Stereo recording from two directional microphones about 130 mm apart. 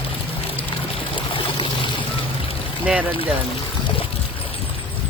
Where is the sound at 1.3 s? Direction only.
40° left (ahead or behind).